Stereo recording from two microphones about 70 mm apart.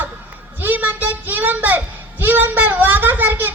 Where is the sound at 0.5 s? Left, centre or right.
Right.